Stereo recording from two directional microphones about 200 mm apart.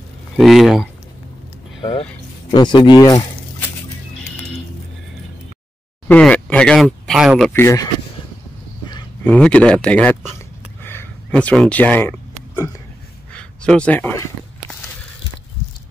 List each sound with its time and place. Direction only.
0.4 s speech: centre (ahead or behind)
1.8 s speech: 25° left (ahead or behind)
6.0 s speech: 5° left (ahead or behind)
7.6 s speech: 15° left (ahead or behind)
9.2 s speech: 5° left (ahead or behind)
10.8 s a sound: 10° left (ahead or behind)